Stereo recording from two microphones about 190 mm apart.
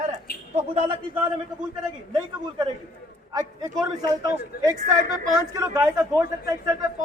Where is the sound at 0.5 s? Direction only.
25° right (ahead or behind).